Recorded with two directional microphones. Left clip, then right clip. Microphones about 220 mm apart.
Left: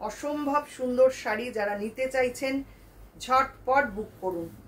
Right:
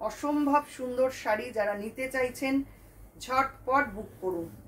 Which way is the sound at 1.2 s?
15° left (ahead or behind).